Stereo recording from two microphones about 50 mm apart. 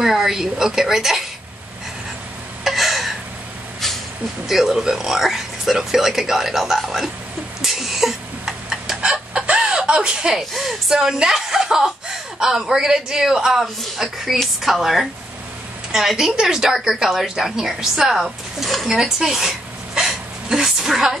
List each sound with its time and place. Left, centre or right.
0.0 s speech: centre
2.6 s a sound: centre
4.5 s speech: centre
7.6 s a sound: centre
9.0 s chicken: right
10.5 s a woman's voice: centre